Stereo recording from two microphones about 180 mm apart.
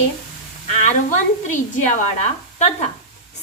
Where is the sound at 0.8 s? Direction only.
45° left (ahead or behind).